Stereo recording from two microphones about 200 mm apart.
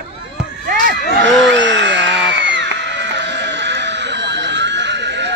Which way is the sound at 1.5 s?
65° right (ahead or behind).